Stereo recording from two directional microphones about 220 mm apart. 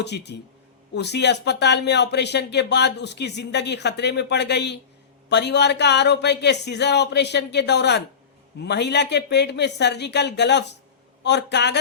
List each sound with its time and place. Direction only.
0.0 s speech: 50° left (ahead or behind)